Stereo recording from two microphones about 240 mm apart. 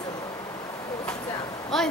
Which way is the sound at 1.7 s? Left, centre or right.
Centre.